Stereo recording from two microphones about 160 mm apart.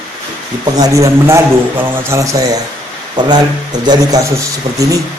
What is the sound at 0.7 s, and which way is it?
Speech, 20° right (ahead or behind).